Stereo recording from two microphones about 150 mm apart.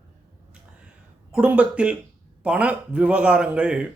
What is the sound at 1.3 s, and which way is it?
Speech, 5° right (ahead or behind).